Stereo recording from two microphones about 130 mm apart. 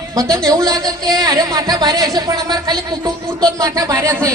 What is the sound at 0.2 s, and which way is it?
Speech, 25° right (ahead or behind).